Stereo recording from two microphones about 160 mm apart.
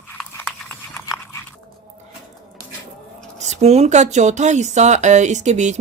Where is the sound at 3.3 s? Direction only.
45° right (ahead or behind).